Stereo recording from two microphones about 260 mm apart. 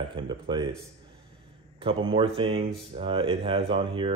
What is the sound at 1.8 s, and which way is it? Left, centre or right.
Speech, right.